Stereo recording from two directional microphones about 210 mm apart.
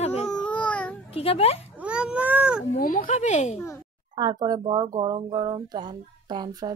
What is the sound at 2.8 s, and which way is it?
Speech, 40° left (ahead or behind).